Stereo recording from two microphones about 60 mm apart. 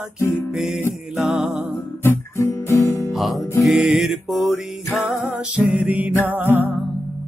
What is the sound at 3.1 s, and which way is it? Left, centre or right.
Music, centre.